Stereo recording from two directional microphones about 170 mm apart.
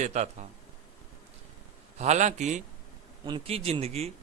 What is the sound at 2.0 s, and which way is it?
Speech, 45° right (ahead or behind).